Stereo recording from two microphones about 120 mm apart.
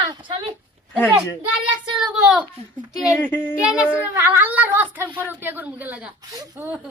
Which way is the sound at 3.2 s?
15° left (ahead or behind).